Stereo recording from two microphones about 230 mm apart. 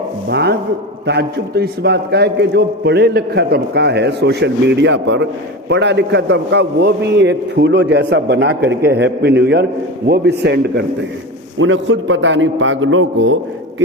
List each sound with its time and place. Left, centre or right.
0.3 s a man's voice: right